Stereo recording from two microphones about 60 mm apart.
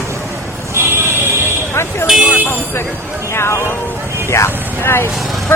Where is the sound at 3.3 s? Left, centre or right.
Left.